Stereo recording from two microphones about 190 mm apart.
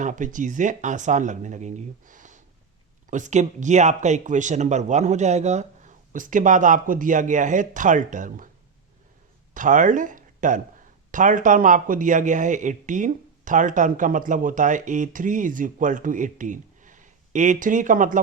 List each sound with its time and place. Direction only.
0.0 s speech: 40° right (ahead or behind)
9.6 s speech: 40° right (ahead or behind)